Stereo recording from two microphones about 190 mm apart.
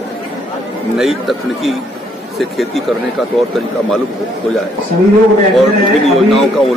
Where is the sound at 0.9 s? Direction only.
Centre (ahead or behind).